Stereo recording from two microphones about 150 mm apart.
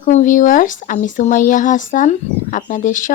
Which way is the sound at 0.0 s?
60° left (ahead or behind).